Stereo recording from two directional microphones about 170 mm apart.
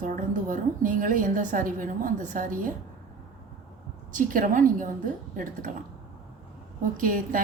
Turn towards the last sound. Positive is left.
turn(degrees=-55)  # may be behind; listen again after turning